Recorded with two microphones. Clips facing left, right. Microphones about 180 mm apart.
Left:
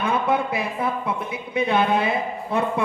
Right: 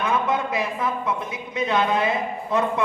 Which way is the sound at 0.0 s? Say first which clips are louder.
Left 1 dB; 30° left (ahead or behind).